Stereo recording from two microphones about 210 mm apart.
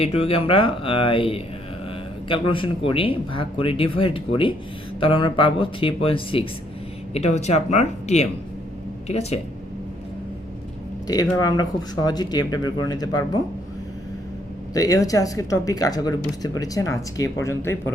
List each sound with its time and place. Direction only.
0.0 s speech: 30° left (ahead or behind)
11.0 s speech: 20° left (ahead or behind)
14.7 s speech: 15° left (ahead or behind)